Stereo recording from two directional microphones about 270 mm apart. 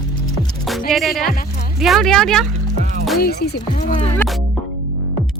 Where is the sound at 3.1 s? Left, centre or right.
Left.